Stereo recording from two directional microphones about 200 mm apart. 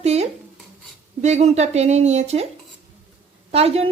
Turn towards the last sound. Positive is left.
turn(degrees=-30)  # may be behind; listen again after turning